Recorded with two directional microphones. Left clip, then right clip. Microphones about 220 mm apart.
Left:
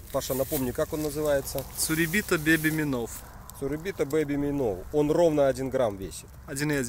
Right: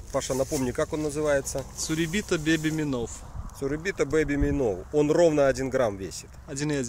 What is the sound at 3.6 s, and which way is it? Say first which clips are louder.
Speech: right 2 dB; 25° right (ahead or behind).